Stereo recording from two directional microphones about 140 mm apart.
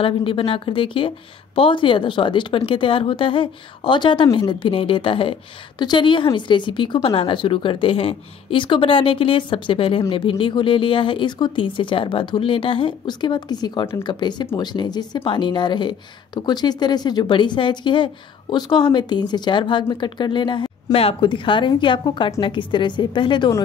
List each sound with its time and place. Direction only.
0.0 s speech: 40° left (ahead or behind)